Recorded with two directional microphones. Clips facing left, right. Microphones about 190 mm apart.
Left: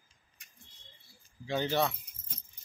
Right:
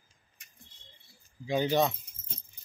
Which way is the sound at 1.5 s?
15° right (ahead or behind).